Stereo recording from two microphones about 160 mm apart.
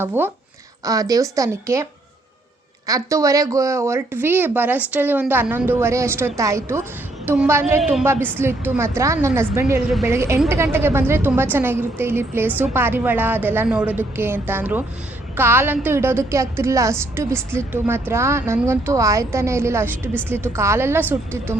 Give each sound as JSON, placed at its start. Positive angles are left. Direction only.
{"t": 0.0, "sound": "a woman's voice", "side_deg": -15}
{"t": 7.8, "sound": "a woman's voice", "side_deg": 0}
{"t": 8.0, "sound": "a woman's voice", "side_deg": -15}